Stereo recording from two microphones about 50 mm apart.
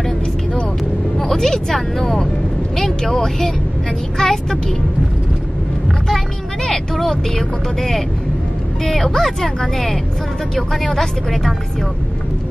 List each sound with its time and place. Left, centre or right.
1.1 s a woman's voice: centre
6.0 s a woman's voice: centre